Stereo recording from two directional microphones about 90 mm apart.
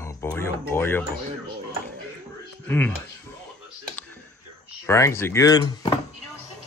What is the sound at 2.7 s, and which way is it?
Speech, 20° left (ahead or behind).